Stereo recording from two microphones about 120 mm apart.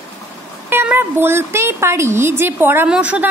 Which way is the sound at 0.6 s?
15° right (ahead or behind).